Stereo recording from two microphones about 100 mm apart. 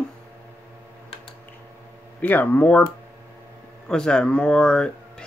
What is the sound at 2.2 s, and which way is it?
Speech, 20° left (ahead or behind).